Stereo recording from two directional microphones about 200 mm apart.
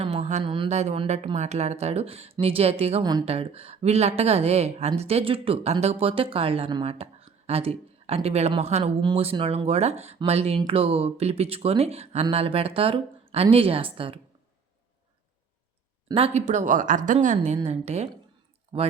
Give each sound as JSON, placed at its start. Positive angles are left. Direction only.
{"t": 0.0, "sound": "speech", "side_deg": -35}
{"t": 16.0, "sound": "speech", "side_deg": -30}